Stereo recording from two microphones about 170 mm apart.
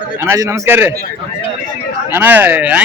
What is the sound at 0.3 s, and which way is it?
Speech, 20° right (ahead or behind).